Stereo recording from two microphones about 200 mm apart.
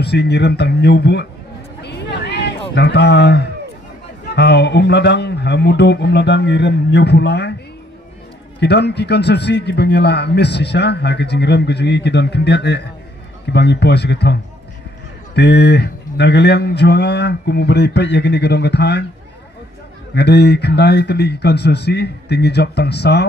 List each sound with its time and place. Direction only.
0.0 s a man's voice: 55° left (ahead or behind)
1.8 s a sound: 55° left (ahead or behind)
2.7 s a man's voice: 60° left (ahead or behind)
8.5 s a man's voice: 55° left (ahead or behind)
20.2 s a man's voice: 55° left (ahead or behind)